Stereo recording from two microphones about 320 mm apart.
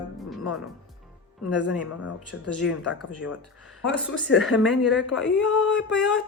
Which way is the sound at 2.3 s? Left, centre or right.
Left.